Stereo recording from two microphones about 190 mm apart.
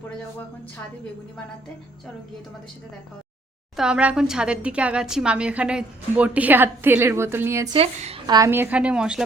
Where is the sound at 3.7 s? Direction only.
5° right (ahead or behind).